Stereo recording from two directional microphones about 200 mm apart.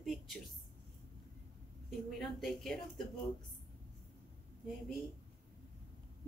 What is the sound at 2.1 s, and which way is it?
Speech, centre (ahead or behind).